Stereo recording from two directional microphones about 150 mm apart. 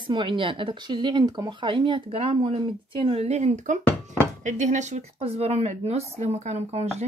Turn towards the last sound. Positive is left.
turn(degrees=-45)  # may be behind; listen again after turning